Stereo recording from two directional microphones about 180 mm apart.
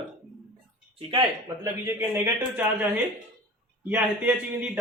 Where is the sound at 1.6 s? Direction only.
10° right (ahead or behind).